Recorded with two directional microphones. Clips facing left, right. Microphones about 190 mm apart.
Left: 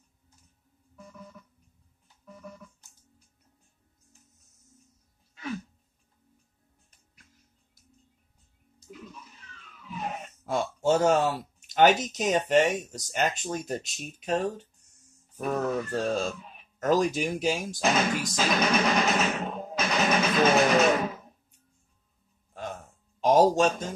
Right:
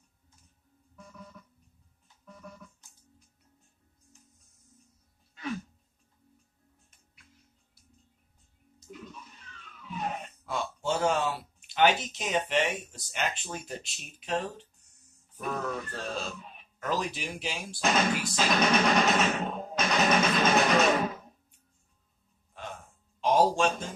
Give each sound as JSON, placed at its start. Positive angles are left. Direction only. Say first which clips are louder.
{"t": 1.4, "sound": "music", "louder": "left 1 dB", "side_deg": 5}
{"t": 8.8, "sound": "music", "louder": "even", "side_deg": 5}
{"t": 10.4, "sound": "speech", "louder": "left 7 dB", "side_deg": 45}
{"t": 18.3, "sound": "speech", "louder": "even", "side_deg": 0}
{"t": 23.2, "sound": "a sound", "louder": "left 4 dB", "side_deg": 40}